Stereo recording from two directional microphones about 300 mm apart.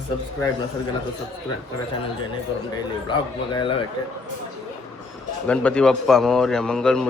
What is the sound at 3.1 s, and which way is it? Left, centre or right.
Speech, centre.